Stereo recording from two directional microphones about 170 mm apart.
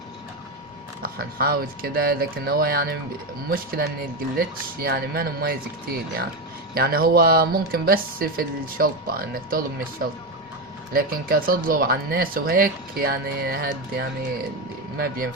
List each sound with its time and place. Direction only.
1.4 s speech: 60° right (ahead or behind)
6.7 s speech: 60° right (ahead or behind)
10.9 s speech: 60° right (ahead or behind)